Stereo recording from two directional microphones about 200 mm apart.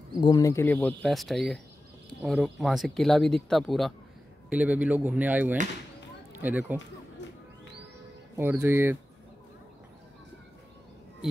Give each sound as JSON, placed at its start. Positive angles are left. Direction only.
{"t": 0.2, "sound": "speech", "side_deg": 20}
{"t": 7.2, "sound": "music", "side_deg": 60}
{"t": 8.4, "sound": "speech", "side_deg": -10}